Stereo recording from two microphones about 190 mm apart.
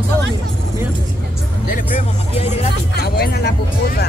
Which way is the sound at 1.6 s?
45° left (ahead or behind).